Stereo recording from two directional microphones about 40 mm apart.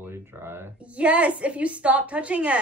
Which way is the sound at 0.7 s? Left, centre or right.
Right.